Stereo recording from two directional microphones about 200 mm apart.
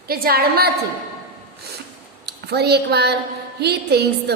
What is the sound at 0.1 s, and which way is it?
Speech, 50° right (ahead or behind).